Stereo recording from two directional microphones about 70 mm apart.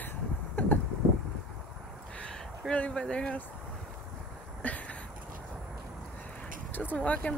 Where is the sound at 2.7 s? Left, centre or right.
Centre.